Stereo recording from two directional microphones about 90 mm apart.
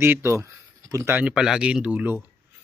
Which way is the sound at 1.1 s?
10° right (ahead or behind).